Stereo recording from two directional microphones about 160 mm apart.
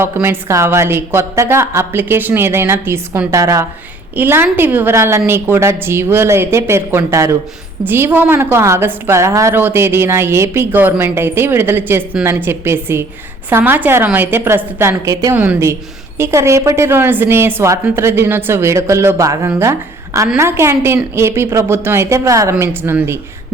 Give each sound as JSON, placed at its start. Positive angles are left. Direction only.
{"t": 0.0, "sound": "a woman's voice", "side_deg": -15}